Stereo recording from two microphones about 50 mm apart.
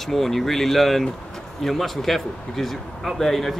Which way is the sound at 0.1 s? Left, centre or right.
Centre.